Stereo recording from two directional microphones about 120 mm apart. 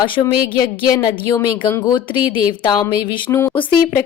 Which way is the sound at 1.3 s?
20° left (ahead or behind).